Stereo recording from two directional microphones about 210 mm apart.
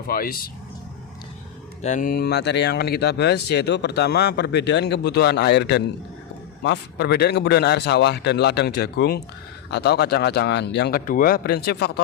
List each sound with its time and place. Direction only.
0.1 s speech: 45° left (ahead or behind)
1.8 s speech: 35° left (ahead or behind)